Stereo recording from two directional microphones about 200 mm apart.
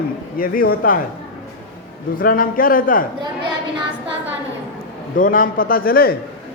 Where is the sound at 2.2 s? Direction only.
45° left (ahead or behind).